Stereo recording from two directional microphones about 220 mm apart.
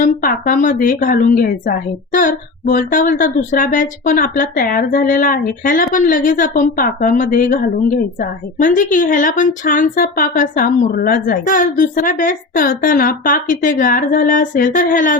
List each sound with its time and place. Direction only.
0.0 s a woman's voice: 40° left (ahead or behind)